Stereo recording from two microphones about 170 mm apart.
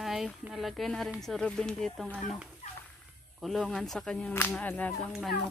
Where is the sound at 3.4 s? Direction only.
Centre (ahead or behind).